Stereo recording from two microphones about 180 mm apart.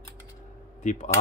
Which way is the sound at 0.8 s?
45° left (ahead or behind).